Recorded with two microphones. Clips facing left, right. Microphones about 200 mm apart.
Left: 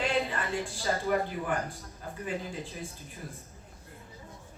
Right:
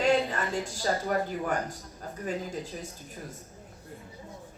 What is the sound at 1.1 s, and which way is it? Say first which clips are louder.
Speech: left 2 dB; 45° right (ahead or behind).